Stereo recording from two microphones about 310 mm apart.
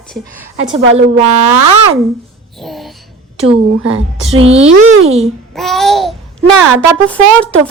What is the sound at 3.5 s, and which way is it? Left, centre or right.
Speech, centre.